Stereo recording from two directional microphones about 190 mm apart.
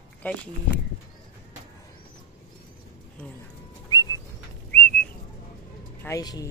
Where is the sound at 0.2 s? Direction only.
10° left (ahead or behind).